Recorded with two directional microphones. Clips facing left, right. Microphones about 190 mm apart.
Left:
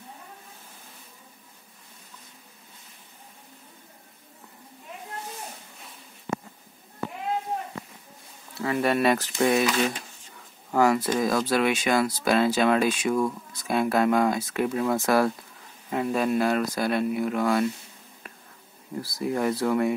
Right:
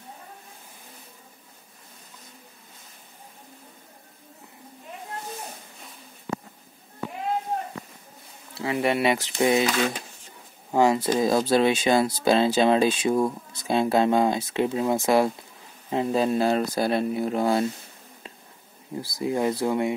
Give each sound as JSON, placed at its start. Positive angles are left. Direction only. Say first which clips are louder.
{"t": 8.6, "sound": "speech", "louder": "even", "side_deg": -20}
{"t": 10.7, "sound": "speech", "louder": "right 1 dB", "side_deg": -25}
{"t": 18.9, "sound": "speech", "louder": "right 1 dB", "side_deg": -20}